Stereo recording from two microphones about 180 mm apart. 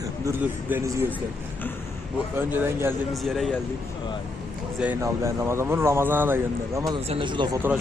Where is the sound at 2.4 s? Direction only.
10° right (ahead or behind).